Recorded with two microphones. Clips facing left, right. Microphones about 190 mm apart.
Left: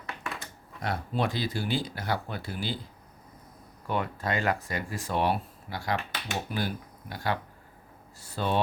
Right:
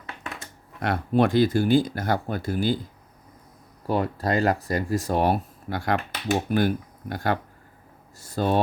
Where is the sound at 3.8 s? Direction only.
35° right (ahead or behind).